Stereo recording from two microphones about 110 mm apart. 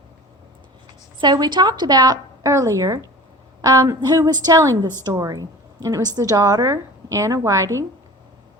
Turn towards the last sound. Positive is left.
turn(degrees=-30)  # may be behind; listen again after turning